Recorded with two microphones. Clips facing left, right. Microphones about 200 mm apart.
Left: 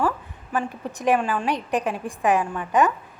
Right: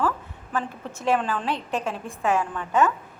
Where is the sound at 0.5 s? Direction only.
15° left (ahead or behind).